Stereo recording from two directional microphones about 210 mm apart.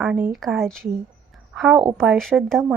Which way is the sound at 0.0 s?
5° right (ahead or behind).